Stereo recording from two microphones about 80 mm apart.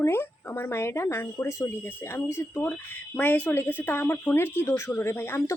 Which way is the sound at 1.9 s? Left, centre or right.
Left.